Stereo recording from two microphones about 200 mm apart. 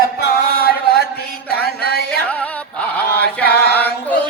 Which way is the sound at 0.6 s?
50° left (ahead or behind).